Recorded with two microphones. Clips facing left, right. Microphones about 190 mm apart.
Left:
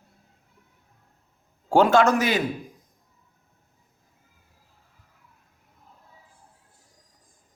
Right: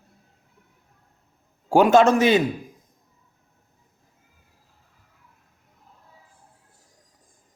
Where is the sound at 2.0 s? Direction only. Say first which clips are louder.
Right 4 dB; 25° right (ahead or behind).